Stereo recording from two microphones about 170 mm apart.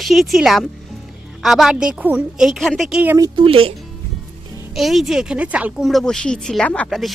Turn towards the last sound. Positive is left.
turn(degrees=0)  # may be behind; listen again after turning